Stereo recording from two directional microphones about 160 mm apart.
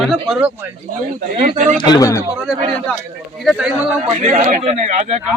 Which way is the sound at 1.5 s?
50° right (ahead or behind).